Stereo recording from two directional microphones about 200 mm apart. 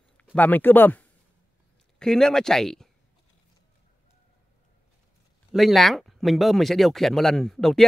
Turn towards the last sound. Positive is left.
turn(degrees=0)  # may be behind; listen again after turning